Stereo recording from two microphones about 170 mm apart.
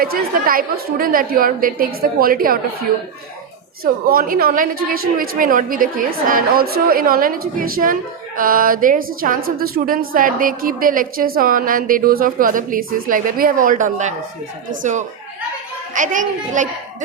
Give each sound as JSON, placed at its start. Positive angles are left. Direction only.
{"t": 0.0, "sound": "speech", "side_deg": -60}
{"t": 4.1, "sound": "a child's voice", "side_deg": -60}